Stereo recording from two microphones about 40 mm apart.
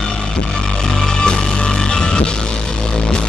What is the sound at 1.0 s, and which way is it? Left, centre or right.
Music, centre.